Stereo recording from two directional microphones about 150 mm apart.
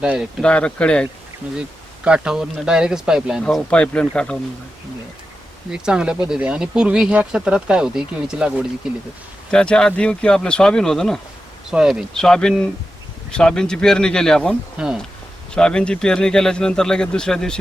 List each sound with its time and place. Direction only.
0.0 s speech: 5° right (ahead or behind)
0.4 s speech: 10° left (ahead or behind)
2.0 s speech: 5° right (ahead or behind)
3.4 s speech: 5° left (ahead or behind)
5.7 s speech: 5° right (ahead or behind)
9.5 s speech: 5° left (ahead or behind)